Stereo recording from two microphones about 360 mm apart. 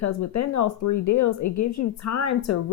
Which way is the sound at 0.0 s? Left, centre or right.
Left.